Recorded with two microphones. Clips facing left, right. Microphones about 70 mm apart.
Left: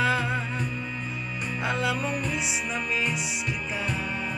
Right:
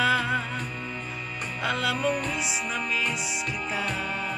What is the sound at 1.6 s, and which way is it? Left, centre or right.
Music, centre.